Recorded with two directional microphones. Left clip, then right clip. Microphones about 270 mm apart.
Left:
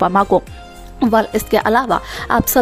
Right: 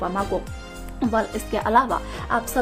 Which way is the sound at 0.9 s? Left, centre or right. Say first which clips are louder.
Left 9 dB; left.